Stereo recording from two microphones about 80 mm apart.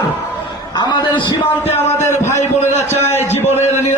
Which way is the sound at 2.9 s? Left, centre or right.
Right.